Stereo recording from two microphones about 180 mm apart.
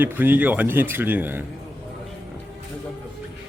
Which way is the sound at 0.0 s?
10° right (ahead or behind).